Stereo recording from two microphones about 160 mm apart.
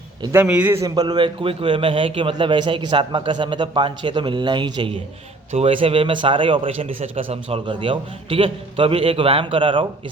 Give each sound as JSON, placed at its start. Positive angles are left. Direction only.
{"t": 0.2, "sound": "a man's voice", "side_deg": -15}